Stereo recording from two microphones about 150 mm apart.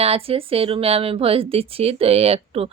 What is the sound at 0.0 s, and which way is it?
Speech, 40° right (ahead or behind).